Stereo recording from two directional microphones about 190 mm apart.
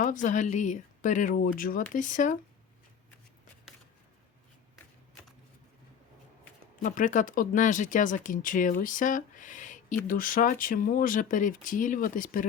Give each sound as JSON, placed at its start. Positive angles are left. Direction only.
{"t": 0.0, "sound": "speech", "side_deg": 45}
{"t": 6.8, "sound": "speech", "side_deg": 40}